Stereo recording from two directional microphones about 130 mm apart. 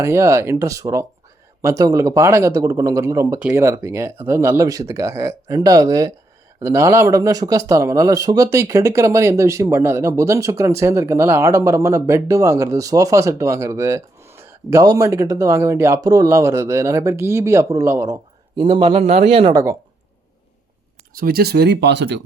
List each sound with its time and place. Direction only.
0.0 s speech: 20° right (ahead or behind)
18.6 s a man's voice: 40° right (ahead or behind)